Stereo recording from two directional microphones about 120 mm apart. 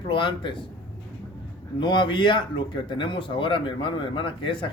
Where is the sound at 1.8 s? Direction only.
40° left (ahead or behind).